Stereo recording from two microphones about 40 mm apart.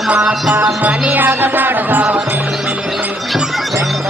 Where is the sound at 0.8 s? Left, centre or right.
Right.